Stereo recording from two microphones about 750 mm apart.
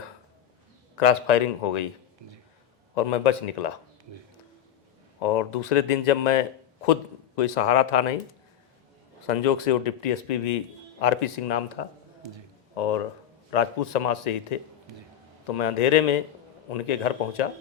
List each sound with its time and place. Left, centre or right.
0.9 s speech: left
2.9 s speech: left
5.2 s speech: left
9.2 s speech: left